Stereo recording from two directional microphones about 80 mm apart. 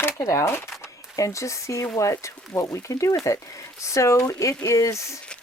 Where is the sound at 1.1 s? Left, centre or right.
Left.